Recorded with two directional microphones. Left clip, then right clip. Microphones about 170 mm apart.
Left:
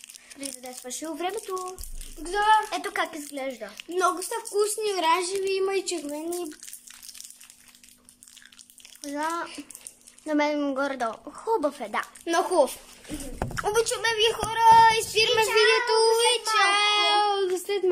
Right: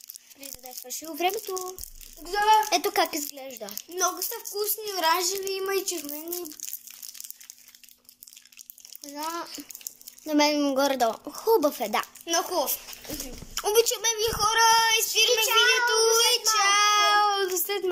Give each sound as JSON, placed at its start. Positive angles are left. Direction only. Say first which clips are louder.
{"t": 0.7, "sound": "speech", "louder": "left 2 dB", "side_deg": 0}
{"t": 3.7, "sound": "a child's voice", "louder": "left 3 dB", "side_deg": 20}
{"t": 9.0, "sound": "speech", "louder": "left 4 dB", "side_deg": -5}
{"t": 12.3, "sound": "a child's voice", "louder": "left 6 dB", "side_deg": 25}
{"t": 13.6, "sound": "speech", "louder": "right 2 dB", "side_deg": -10}
{"t": 14.0, "sound": "speech", "louder": "left 3 dB", "side_deg": 15}
{"t": 14.5, "sound": "a child's voice", "louder": "left 5 dB", "side_deg": 25}
{"t": 15.5, "sound": "child singing", "louder": "left 1 dB", "side_deg": 30}